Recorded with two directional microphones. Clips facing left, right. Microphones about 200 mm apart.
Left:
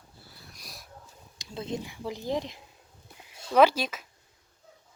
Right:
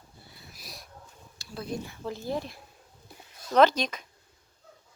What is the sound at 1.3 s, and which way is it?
Speech, 20° left (ahead or behind).